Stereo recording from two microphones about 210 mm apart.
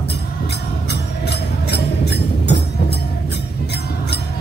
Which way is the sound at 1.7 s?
50° left (ahead or behind).